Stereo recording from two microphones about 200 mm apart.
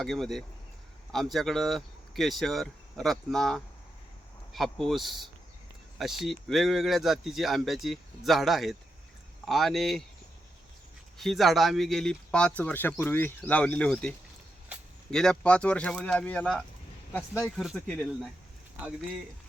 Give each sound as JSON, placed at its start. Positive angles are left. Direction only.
{"t": 0.0, "sound": "speech", "side_deg": 0}
{"t": 11.2, "sound": "speech", "side_deg": 0}